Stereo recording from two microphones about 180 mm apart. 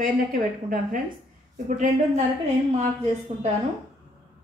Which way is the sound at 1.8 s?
40° right (ahead or behind).